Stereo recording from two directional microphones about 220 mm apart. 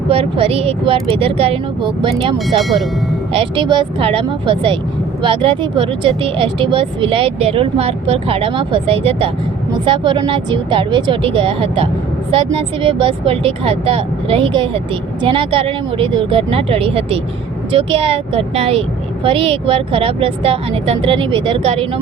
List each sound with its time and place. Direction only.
0.1 s a woman's voice: 25° right (ahead or behind)
2.6 s speech: centre (ahead or behind)
3.3 s a woman's voice: 20° right (ahead or behind)